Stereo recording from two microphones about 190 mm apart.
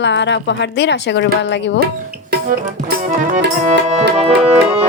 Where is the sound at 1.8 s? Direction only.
55° right (ahead or behind).